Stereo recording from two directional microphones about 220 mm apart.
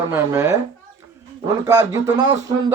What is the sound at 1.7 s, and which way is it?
Speech, 15° right (ahead or behind).